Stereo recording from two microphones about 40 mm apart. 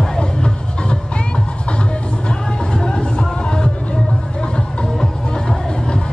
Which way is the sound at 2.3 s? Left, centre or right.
Left.